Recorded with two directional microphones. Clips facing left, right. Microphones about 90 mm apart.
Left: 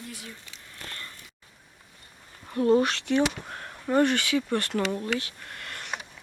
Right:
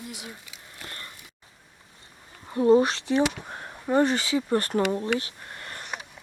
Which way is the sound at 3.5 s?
20° right (ahead or behind).